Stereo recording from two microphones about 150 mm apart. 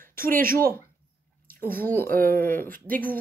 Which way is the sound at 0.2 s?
70° right (ahead or behind).